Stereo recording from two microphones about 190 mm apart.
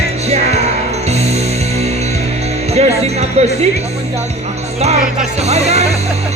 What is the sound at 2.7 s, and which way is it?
Speech, 35° right (ahead or behind).